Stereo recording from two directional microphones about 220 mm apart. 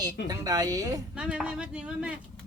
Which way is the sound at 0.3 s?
15° right (ahead or behind).